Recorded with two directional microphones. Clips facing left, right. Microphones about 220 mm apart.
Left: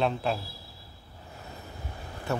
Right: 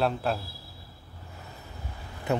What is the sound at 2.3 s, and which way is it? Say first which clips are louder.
Speech: right 3 dB; 20° right (ahead or behind).